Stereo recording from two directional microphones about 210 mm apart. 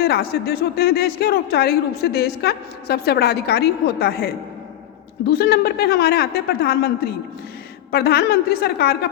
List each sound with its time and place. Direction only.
0.0 s speech: 50° left (ahead or behind)